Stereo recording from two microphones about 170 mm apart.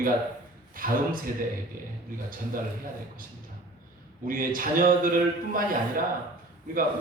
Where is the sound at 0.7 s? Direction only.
55° right (ahead or behind).